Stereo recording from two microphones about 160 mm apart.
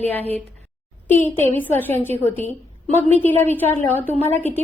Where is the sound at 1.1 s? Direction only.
15° left (ahead or behind).